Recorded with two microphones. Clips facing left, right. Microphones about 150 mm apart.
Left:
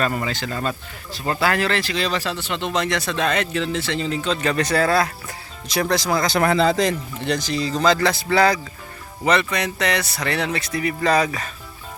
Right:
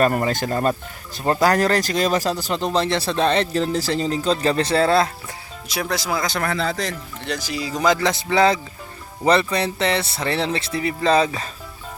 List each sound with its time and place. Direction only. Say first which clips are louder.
0.0 s speech: right 5 dB; 45° right (ahead or behind); by 5.1 s 25° right (ahead or behind)
5.6 s speech: left 4 dB; 5° right (ahead or behind)
6.4 s speech: left 6 dB; 20° left (ahead or behind)
7.3 s speech: left 4 dB; 5° right (ahead or behind); by 11.4 s 25° right (ahead or behind)